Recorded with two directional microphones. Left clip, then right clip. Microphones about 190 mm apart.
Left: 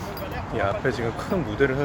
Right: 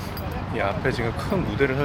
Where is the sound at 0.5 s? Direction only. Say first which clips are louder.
Even; centre (ahead or behind).